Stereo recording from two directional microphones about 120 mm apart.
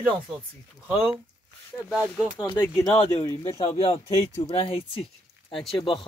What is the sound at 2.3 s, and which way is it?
Speech, 35° left (ahead or behind).